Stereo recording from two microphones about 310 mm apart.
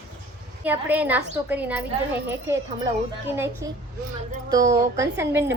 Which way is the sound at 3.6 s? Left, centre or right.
Centre.